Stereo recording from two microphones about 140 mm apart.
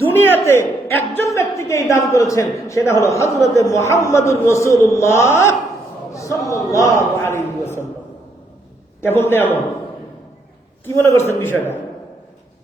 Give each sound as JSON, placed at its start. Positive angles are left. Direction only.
{"t": 0.0, "sound": "a man's voice", "side_deg": 15}
{"t": 9.0, "sound": "a man's voice", "side_deg": 20}
{"t": 10.8, "sound": "a man's voice", "side_deg": 15}